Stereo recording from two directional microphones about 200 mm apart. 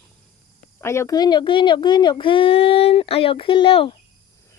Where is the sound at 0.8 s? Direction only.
15° left (ahead or behind).